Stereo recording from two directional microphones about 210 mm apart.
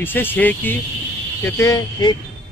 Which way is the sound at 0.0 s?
10° left (ahead or behind).